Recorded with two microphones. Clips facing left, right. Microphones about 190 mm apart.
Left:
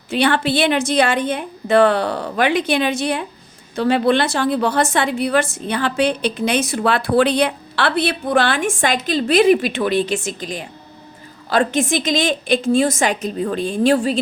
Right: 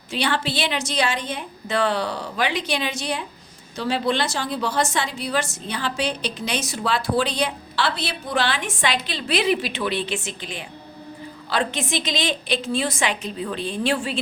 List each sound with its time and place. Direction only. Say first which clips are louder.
0.1 s a woman's voice: left 7 dB; 55° left (ahead or behind); by 14.2 s 40° left (ahead or behind)